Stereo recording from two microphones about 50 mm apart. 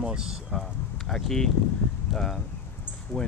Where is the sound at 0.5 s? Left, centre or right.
Centre.